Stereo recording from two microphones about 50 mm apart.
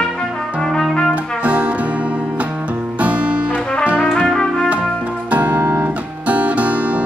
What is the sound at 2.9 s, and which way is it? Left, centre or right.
Music, right.